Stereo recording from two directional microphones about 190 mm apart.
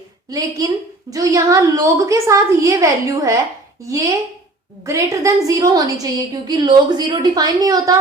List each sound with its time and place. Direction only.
0.3 s a woman's voice: 20° right (ahead or behind)